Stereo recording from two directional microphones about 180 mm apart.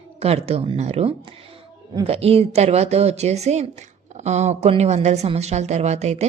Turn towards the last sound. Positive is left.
turn(degrees=-40)  # may be behind; listen again after turning